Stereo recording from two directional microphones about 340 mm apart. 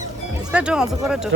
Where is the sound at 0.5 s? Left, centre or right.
Centre.